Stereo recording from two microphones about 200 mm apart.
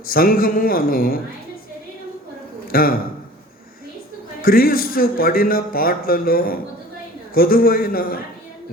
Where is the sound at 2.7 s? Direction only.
45° left (ahead or behind).